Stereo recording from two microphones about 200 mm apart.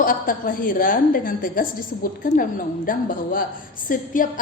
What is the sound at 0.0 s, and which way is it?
A woman's voice, 45° left (ahead or behind).